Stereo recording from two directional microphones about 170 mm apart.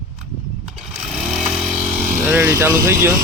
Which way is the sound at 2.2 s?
15° right (ahead or behind).